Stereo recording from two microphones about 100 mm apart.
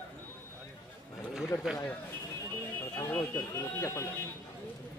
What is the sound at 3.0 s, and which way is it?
Speech, 20° left (ahead or behind).